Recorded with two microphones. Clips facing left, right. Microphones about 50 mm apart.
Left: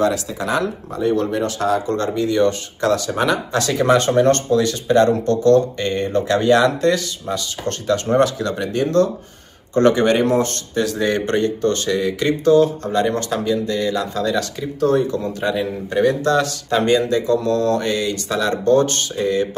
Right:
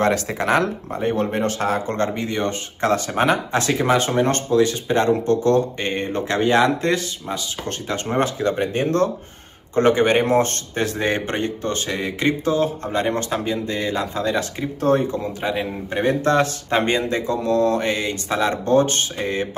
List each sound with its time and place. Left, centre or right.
0.0 s speech: right
0.9 s speech: right
3.7 s speech: centre; by 9.1 s right
9.8 s speech: centre; by 15.1 s right
15.1 s speech: centre